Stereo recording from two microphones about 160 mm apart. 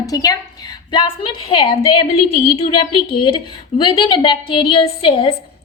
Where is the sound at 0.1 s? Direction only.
20° left (ahead or behind).